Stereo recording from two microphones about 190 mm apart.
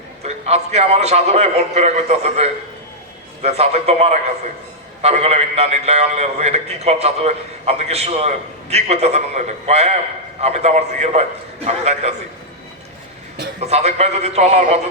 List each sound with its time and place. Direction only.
0.2 s a man's voice: 35° right (ahead or behind)
13.6 s a man's voice: 35° right (ahead or behind)